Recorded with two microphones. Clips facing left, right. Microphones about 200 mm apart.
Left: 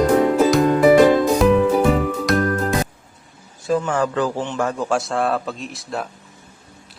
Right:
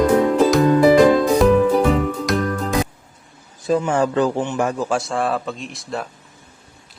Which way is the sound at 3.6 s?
20° right (ahead or behind).